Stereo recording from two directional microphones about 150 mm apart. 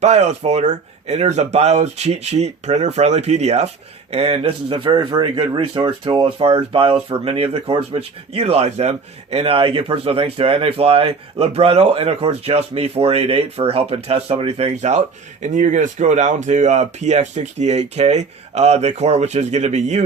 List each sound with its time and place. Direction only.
0.0 s speech: 50° right (ahead or behind)